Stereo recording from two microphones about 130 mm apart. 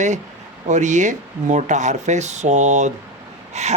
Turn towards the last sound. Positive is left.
turn(degrees=-60)  # may be behind; listen again after turning